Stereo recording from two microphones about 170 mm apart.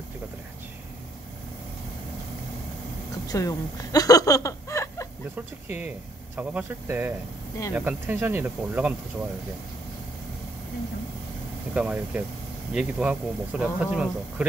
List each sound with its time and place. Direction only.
3.3 s speech: 20° left (ahead or behind)
5.3 s speech: 10° right (ahead or behind)
11.7 s speech: 5° right (ahead or behind)